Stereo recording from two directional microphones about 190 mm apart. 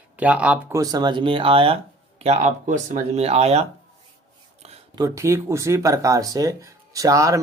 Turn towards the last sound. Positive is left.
turn(degrees=-15)  # may be behind; listen again after turning